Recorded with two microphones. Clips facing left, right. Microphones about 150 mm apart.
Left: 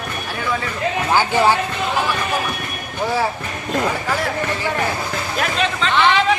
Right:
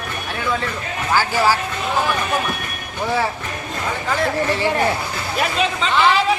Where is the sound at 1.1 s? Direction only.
20° left (ahead or behind).